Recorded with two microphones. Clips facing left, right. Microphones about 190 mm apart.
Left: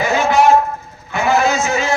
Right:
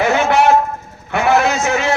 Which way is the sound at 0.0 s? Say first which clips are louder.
Even; 65° right (ahead or behind).